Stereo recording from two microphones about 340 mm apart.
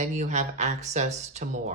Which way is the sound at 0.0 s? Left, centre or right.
Right.